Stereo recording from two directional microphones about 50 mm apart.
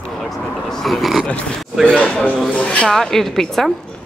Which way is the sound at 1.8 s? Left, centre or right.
Centre.